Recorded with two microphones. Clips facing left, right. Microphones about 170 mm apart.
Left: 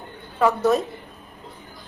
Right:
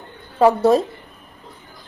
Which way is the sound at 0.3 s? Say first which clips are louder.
Right 5 dB; 30° right (ahead or behind).